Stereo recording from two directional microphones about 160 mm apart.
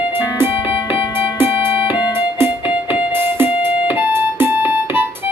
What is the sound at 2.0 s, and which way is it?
Music, 25° left (ahead or behind).